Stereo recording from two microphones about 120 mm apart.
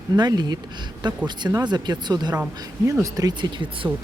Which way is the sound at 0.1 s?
35° right (ahead or behind).